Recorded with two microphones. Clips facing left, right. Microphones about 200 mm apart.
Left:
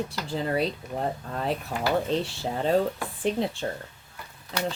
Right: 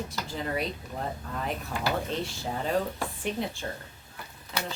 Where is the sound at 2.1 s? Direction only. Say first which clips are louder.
Left 5 dB; 30° left (ahead or behind).